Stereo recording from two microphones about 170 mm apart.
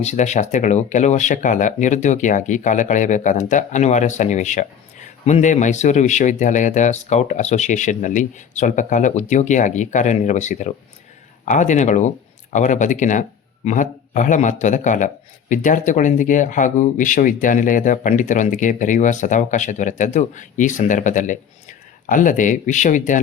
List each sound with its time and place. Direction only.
0.0 s speech: 40° left (ahead or behind)